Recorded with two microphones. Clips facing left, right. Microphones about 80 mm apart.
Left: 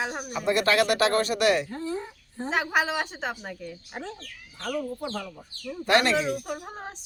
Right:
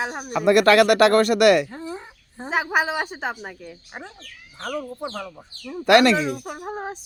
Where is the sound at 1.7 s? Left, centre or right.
Right.